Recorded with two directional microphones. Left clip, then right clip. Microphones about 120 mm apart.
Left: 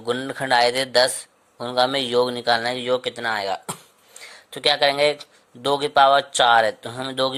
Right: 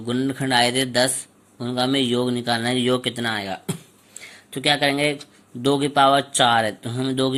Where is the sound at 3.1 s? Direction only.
15° left (ahead or behind).